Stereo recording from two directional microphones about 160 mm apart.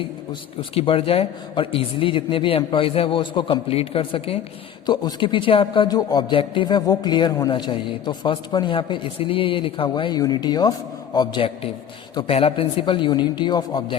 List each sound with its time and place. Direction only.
0.7 s speech: 35° left (ahead or behind)